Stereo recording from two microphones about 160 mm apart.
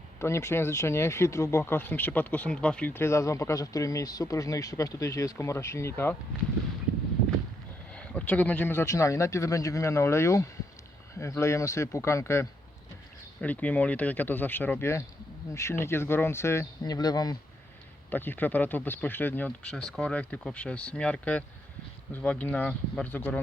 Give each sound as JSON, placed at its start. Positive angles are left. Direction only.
{"t": 0.2, "sound": "speech", "side_deg": 15}
{"t": 7.9, "sound": "speech", "side_deg": 10}
{"t": 18.1, "sound": "speech", "side_deg": 10}